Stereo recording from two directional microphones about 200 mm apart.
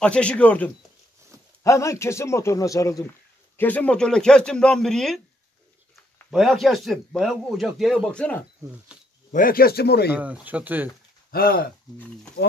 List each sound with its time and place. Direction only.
0.0 s a man's voice: 5° left (ahead or behind)
6.3 s a man's voice: centre (ahead or behind)
9.3 s speech: 45° left (ahead or behind)
10.1 s speech: 5° right (ahead or behind)
11.3 s speech: 45° left (ahead or behind)